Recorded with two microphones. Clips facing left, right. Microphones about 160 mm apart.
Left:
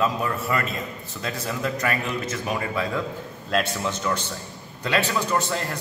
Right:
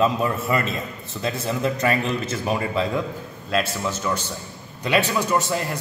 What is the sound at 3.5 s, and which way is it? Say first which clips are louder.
Speech: right 1 dB; centre (ahead or behind).